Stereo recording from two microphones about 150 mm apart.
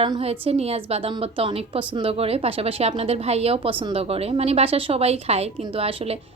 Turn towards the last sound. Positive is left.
turn(degrees=-40)  # may be behind; listen again after turning